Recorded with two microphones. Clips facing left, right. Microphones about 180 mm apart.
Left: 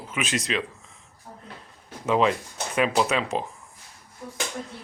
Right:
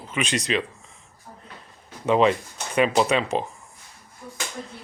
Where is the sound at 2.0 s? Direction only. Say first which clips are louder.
Right 3 dB; centre (ahead or behind).